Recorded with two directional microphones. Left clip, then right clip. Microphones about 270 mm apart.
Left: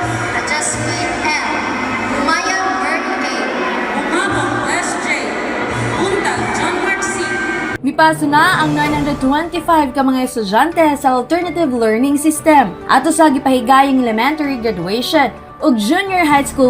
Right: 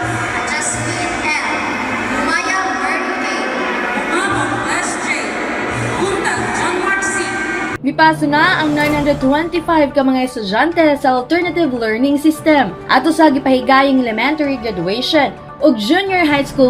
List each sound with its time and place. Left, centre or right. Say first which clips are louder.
7.9 s a woman's voice: left 1 dB; left
12.5 s speech: left 4 dB; left
15.9 s speech: left 1 dB; centre